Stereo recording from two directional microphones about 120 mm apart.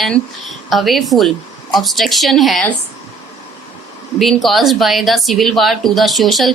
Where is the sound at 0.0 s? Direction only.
Centre (ahead or behind).